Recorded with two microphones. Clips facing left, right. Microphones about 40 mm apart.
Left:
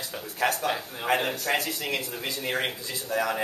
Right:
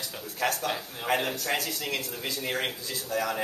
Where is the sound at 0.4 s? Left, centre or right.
Centre.